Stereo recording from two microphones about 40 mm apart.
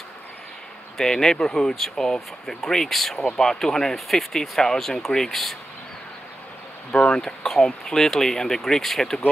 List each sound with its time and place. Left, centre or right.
0.9 s speech: centre
6.9 s speech: left
7.2 s speech: centre